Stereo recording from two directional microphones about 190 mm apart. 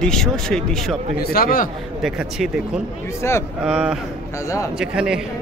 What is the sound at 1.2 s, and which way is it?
Speech, 50° left (ahead or behind).